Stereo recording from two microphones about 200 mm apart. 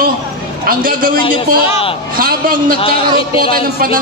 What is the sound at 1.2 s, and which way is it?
Speech, 25° left (ahead or behind).